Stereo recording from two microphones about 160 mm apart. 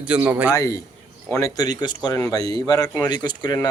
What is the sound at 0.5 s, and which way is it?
Speech, 20° left (ahead or behind).